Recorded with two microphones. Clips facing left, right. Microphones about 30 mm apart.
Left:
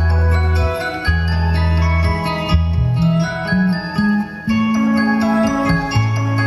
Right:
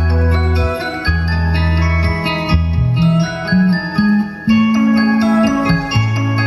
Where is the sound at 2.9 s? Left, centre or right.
Right.